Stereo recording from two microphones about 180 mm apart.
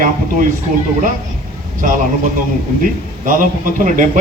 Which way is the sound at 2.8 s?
50° right (ahead or behind).